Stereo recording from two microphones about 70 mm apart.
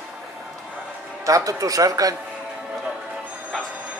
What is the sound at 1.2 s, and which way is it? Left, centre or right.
Speech, right.